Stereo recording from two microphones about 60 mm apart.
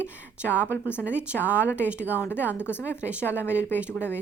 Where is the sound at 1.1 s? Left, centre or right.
Right.